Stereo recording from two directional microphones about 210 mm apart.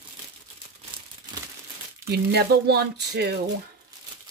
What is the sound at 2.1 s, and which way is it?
Speech, 50° right (ahead or behind).